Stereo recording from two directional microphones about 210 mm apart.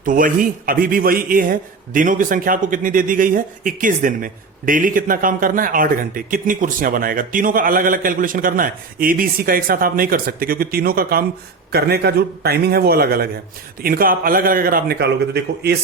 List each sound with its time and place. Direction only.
0.0 s a man's voice: 40° right (ahead or behind)